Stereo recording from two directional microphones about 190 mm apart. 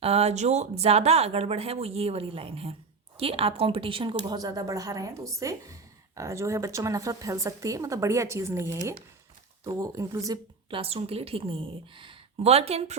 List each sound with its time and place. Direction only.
0.0 s a woman's voice: 35° right (ahead or behind); by 10.8 s 20° right (ahead or behind)
10.8 s speech: 30° right (ahead or behind)